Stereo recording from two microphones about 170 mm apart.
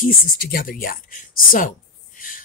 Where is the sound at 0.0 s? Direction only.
60° left (ahead or behind).